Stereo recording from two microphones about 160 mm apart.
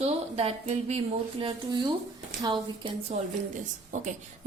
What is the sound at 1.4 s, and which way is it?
Speech, 30° right (ahead or behind).